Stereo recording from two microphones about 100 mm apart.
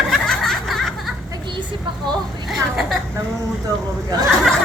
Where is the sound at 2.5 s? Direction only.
Centre (ahead or behind).